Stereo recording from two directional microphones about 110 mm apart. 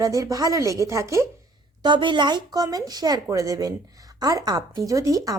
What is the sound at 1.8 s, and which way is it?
Speech, 45° right (ahead or behind).